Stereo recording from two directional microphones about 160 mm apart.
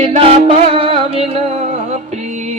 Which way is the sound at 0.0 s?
40° right (ahead or behind).